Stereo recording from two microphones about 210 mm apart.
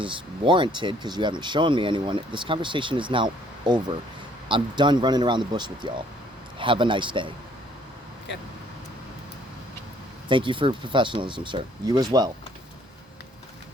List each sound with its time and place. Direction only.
0.0 s speech: 25° right (ahead or behind)
10.2 s speech: 25° right (ahead or behind)